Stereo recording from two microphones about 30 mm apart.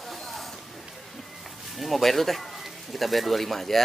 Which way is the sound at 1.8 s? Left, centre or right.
Centre.